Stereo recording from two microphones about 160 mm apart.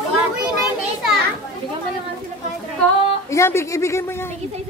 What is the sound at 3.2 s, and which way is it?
A woman's voice, 15° left (ahead or behind).